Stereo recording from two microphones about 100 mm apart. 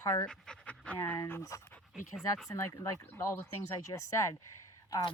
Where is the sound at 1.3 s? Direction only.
30° left (ahead or behind).